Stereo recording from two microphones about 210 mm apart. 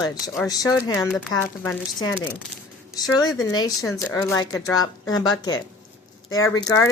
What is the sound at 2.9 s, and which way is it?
A woman's voice, 20° left (ahead or behind).